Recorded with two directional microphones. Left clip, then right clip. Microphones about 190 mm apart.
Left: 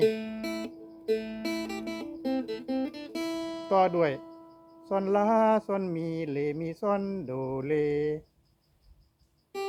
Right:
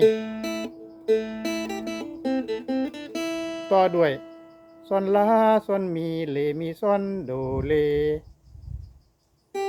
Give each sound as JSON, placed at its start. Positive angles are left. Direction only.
{"t": 0.0, "sound": "music", "side_deg": -20}
{"t": 3.8, "sound": "speech", "side_deg": -5}
{"t": 4.9, "sound": "mantra", "side_deg": -5}